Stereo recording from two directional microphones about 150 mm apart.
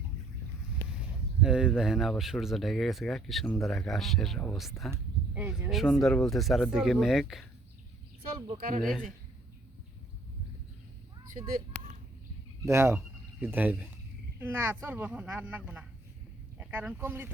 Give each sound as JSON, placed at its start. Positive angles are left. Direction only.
{"t": 1.4, "sound": "speech", "side_deg": -5}
{"t": 8.8, "sound": "speech", "side_deg": 0}
{"t": 12.6, "sound": "speech", "side_deg": -15}